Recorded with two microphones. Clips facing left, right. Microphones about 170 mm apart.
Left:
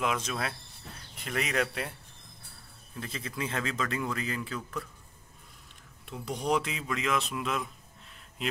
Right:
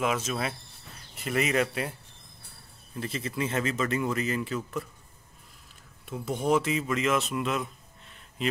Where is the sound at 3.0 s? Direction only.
5° right (ahead or behind).